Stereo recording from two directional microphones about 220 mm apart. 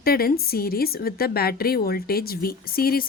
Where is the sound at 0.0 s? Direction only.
45° left (ahead or behind).